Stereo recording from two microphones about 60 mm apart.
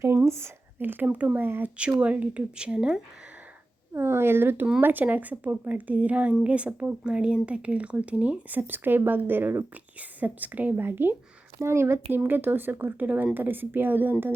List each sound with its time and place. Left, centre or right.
0.3 s speech: right
0.8 s speech: right
1.5 s speech: right
1.8 s speech: right
3.9 s speech: right
11.6 s speech: right